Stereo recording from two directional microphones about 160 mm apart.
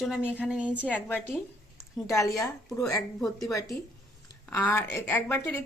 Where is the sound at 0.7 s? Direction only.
10° left (ahead or behind).